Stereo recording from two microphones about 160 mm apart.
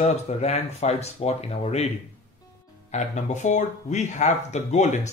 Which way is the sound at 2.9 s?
45° left (ahead or behind).